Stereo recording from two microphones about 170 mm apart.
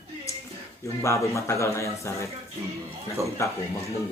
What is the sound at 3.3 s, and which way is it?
Speech, 15° left (ahead or behind).